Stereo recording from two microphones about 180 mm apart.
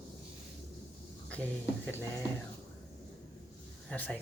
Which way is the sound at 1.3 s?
10° left (ahead or behind).